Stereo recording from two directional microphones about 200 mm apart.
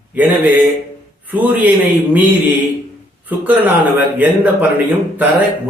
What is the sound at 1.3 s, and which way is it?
Speech, 10° right (ahead or behind).